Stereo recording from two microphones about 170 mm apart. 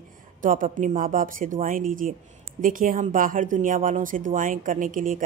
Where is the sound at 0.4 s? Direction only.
50° right (ahead or behind).